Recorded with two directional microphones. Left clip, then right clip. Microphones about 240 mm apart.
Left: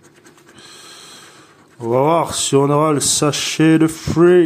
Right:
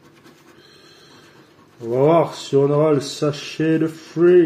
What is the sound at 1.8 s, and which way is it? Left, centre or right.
Speech, left.